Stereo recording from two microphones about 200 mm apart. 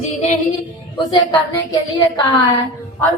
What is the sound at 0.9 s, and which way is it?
A woman's voice, 20° left (ahead or behind).